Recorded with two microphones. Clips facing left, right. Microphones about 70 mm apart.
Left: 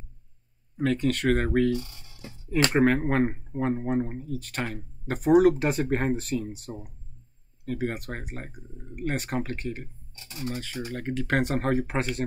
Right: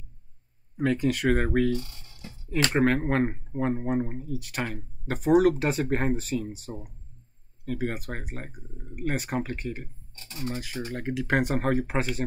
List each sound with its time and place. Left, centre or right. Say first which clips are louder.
0.7 s speech: even; centre
1.8 s a sound: left 1 dB; centre
2.7 s speech: even; centre
10.9 s speech: right 1 dB; centre